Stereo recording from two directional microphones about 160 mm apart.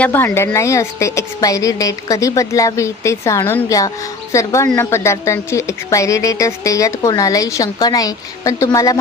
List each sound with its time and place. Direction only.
0.0 s a woman's voice: 10° left (ahead or behind)